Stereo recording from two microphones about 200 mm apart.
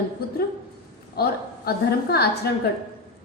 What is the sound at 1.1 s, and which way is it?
A woman's voice, 50° left (ahead or behind).